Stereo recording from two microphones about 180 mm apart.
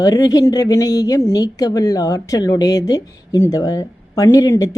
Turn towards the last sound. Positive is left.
turn(degrees=20)  # may be behind; listen again after turning